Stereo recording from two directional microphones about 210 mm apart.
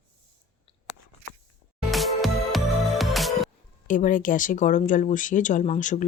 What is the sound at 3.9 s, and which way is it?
Speech, 40° left (ahead or behind).